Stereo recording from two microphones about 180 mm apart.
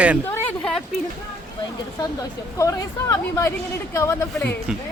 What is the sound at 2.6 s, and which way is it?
Speech, 20° left (ahead or behind).